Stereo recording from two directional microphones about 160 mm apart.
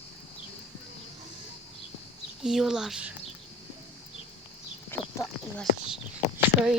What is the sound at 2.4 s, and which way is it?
Speech, centre (ahead or behind).